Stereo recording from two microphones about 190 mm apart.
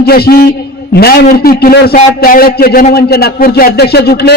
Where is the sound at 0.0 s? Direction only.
55° left (ahead or behind).